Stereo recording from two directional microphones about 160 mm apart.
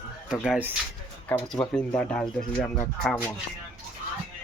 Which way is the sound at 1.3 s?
5° left (ahead or behind).